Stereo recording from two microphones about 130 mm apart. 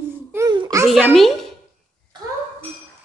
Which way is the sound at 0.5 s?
30° right (ahead or behind).